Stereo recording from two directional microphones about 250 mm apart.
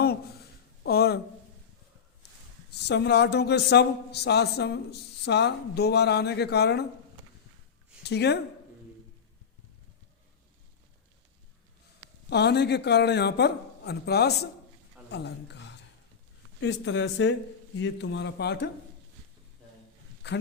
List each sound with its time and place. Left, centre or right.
0.9 s a sound: left
2.7 s a man's voice: left
8.0 s speech: left
12.3 s a man's voice: left